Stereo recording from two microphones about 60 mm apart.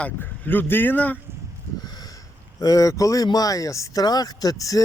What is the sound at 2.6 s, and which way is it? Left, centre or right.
Speech, left.